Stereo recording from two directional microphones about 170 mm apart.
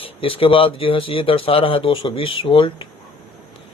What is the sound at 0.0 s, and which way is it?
Speech, 30° left (ahead or behind).